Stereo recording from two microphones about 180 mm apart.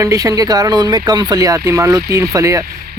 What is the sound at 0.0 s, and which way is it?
Speech, 20° right (ahead or behind).